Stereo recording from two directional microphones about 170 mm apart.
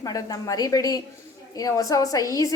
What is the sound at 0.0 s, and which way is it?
Speech, 20° left (ahead or behind).